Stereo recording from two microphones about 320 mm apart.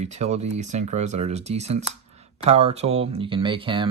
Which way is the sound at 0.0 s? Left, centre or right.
Right.